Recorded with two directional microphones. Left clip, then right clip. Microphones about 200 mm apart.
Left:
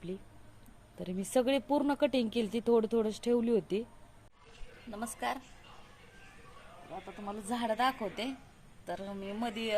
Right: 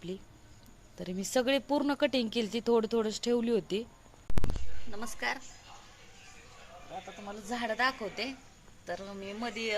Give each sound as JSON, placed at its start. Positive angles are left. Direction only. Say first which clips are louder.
{"t": 0.9, "sound": "speech", "louder": "even", "side_deg": 0}
{"t": 4.9, "sound": "speech", "louder": "right 1 dB", "side_deg": 5}
{"t": 7.3, "sound": "speech", "louder": "left 1 dB", "side_deg": 5}